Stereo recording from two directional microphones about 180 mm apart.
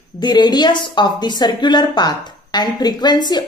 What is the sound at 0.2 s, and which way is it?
A woman's voice, 25° left (ahead or behind).